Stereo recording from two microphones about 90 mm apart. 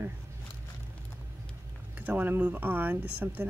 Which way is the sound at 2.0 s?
20° right (ahead or behind).